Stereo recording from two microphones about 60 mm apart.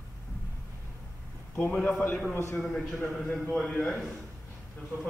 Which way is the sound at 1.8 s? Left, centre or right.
Left.